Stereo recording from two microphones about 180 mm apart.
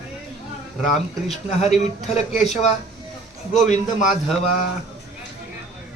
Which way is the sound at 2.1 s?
40° left (ahead or behind).